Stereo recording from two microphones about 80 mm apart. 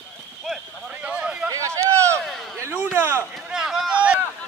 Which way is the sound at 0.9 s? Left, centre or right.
Centre.